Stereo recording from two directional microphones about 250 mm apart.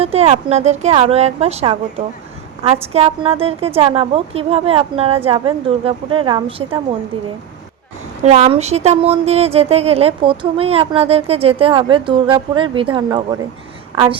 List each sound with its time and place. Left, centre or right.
0.0 s speech: right
2.8 s speech: right
8.2 s a woman's voice: right